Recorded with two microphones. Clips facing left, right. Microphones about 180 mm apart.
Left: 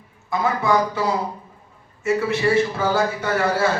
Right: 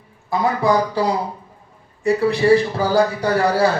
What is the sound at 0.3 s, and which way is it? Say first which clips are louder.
Speech: right 3 dB; 35° right (ahead or behind).